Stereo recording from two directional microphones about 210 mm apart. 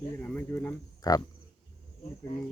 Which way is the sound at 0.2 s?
10° left (ahead or behind).